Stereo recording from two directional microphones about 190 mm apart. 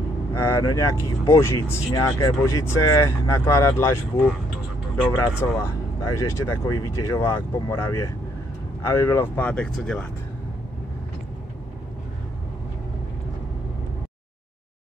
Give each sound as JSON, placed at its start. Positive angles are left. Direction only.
{"t": 0.3, "sound": "speech", "side_deg": 15}
{"t": 5.4, "sound": "speech", "side_deg": 15}